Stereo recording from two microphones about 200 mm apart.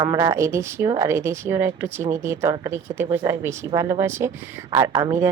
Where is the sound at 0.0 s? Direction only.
15° right (ahead or behind).